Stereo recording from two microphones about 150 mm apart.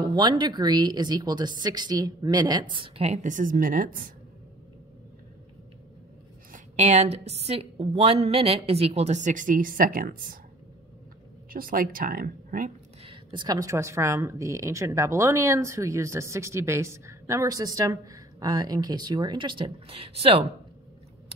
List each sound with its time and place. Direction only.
0.1 s a woman's voice: 30° right (ahead or behind); by 4.1 s 70° right (ahead or behind)
6.5 s a woman's voice: 50° right (ahead or behind); by 10.4 s 70° right (ahead or behind)
11.5 s speech: 70° right (ahead or behind)
13.0 s a woman's voice: 35° right (ahead or behind)